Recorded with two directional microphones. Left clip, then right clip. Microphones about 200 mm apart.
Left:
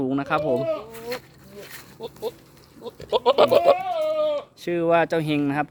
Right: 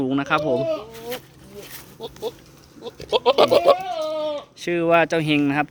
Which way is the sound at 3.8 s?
20° left (ahead or behind).